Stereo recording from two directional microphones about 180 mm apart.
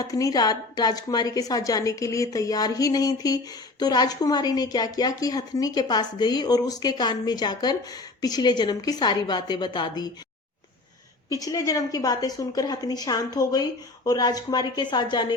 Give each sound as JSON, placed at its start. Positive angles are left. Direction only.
{"t": 0.0, "sound": "a woman's voice", "side_deg": 20}
{"t": 11.3, "sound": "a woman's voice", "side_deg": 20}